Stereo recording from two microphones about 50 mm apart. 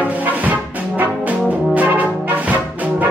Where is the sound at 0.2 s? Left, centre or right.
Right.